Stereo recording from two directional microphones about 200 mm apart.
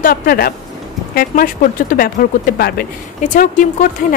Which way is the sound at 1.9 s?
45° left (ahead or behind).